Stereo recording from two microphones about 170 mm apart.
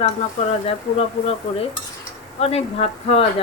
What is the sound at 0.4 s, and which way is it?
Speech, 40° left (ahead or behind).